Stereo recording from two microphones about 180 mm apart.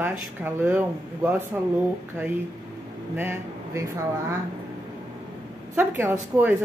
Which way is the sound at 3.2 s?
15° right (ahead or behind).